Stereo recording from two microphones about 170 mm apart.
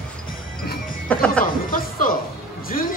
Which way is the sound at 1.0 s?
5° left (ahead or behind).